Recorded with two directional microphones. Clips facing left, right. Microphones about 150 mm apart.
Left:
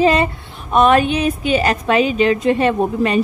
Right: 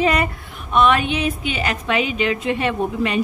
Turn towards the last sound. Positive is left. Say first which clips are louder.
# left 5 dB
turn(degrees=40)  # may be behind; listen again after turning